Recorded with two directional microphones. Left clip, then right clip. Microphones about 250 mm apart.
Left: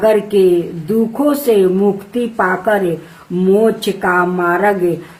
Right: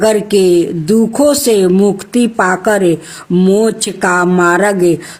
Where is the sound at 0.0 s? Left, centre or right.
Right.